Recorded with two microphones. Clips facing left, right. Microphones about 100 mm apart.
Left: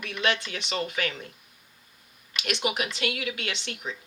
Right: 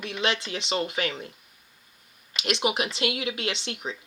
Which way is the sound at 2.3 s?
30° right (ahead or behind).